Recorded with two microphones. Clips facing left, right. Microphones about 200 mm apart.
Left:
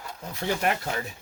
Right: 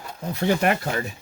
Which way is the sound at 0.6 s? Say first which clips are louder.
Right 5 dB; 70° right (ahead or behind).